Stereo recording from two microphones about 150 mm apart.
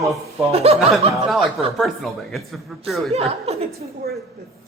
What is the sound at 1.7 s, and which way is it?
Speech, centre (ahead or behind).